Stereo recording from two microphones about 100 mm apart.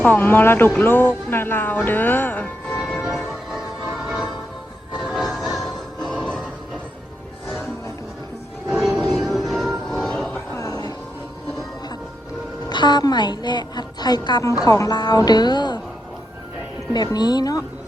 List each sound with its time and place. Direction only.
0.0 s speech: 20° left (ahead or behind)
2.6 s music: centre (ahead or behind)
8.7 s music: centre (ahead or behind)
10.6 s music: 40° left (ahead or behind)
12.6 s a woman's voice: 45° left (ahead or behind)
16.9 s a woman's voice: 45° left (ahead or behind)